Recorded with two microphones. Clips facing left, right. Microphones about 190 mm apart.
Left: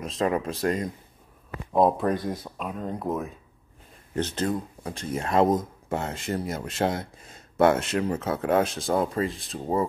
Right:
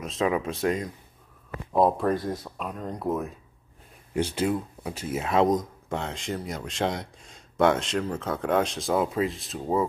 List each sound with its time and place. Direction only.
0.0 s speech: centre (ahead or behind)
4.1 s speech: 10° right (ahead or behind)